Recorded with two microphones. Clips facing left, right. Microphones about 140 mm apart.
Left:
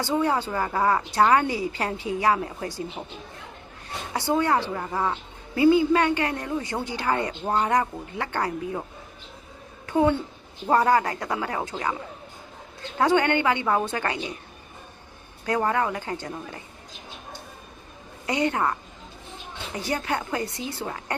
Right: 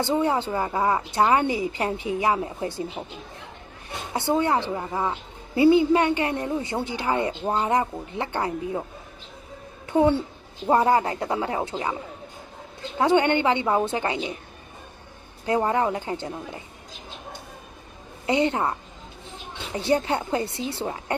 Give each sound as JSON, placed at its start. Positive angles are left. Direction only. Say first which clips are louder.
{"t": 0.0, "sound": "a woman's voice", "louder": "right 1 dB", "side_deg": -20}
{"t": 3.0, "sound": "a woman's voice", "louder": "right 2 dB", "side_deg": 0}
{"t": 4.1, "sound": "a woman's voice", "louder": "right 1 dB", "side_deg": -20}
{"t": 9.8, "sound": "a sound", "louder": "right 2 dB", "side_deg": -20}
{"t": 10.7, "sound": "a woman's voice", "louder": "right 1 dB", "side_deg": -20}
{"t": 13.0, "sound": "a woman's voice", "louder": "right 1 dB", "side_deg": -20}
{"t": 15.4, "sound": "a woman's voice", "louder": "right 2 dB", "side_deg": -25}
{"t": 18.3, "sound": "a woman's voice", "louder": "right 2 dB", "side_deg": -25}